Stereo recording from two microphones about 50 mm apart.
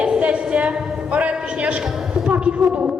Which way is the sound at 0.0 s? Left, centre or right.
Right.